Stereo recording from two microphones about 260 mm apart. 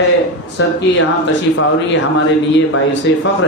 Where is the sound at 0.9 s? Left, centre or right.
Left.